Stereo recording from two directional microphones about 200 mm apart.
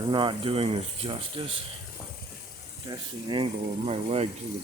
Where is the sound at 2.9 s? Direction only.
25° right (ahead or behind).